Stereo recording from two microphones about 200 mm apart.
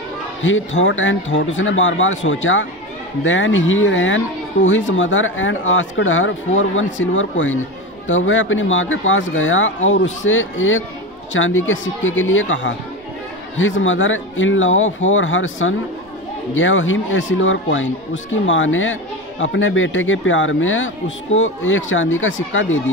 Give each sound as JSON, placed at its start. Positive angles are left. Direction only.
{"t": 0.4, "sound": "speech", "side_deg": 75}